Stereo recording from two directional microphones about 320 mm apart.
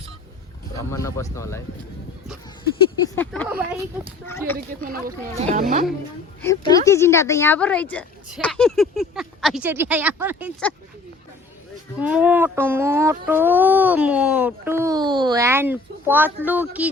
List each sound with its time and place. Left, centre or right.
0.8 s speech: centre
3.2 s speech: centre
4.8 s speech: right
6.4 s speech: centre
11.9 s speech: centre